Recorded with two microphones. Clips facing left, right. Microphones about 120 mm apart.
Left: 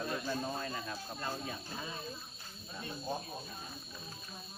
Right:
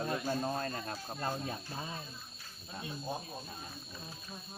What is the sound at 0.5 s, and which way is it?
Speech, 50° right (ahead or behind).